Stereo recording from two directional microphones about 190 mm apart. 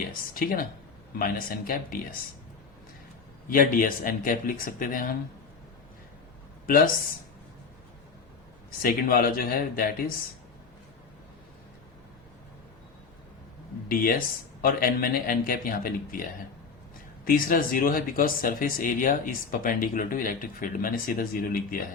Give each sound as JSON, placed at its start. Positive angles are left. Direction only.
{"t": 0.3, "sound": "speech", "side_deg": 50}
{"t": 3.5, "sound": "speech", "side_deg": 45}
{"t": 8.8, "sound": "speech", "side_deg": 50}
{"t": 13.8, "sound": "speech", "side_deg": 50}